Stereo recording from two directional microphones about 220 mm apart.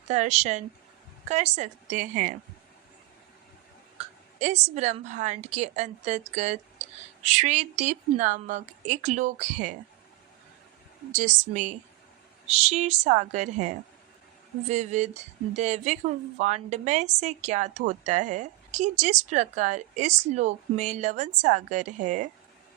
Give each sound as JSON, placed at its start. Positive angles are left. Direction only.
{"t": 0.1, "sound": "speech", "side_deg": -30}
{"t": 3.9, "sound": "speech", "side_deg": -30}
{"t": 11.1, "sound": "speech", "side_deg": -35}